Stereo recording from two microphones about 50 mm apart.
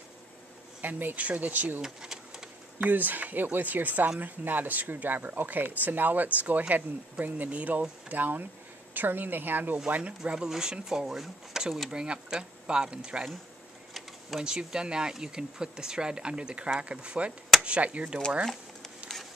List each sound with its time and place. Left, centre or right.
0.8 s speech: right
1.8 s a sound: centre
2.8 s speech: right
9.8 s speech: right
10.3 s speech: centre
11.9 s speech: centre
14.4 s speech: centre